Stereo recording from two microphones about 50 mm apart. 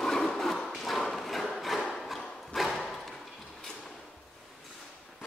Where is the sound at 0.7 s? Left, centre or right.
Centre.